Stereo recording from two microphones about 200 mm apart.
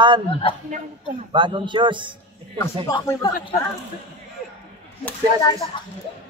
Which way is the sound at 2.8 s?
15° left (ahead or behind).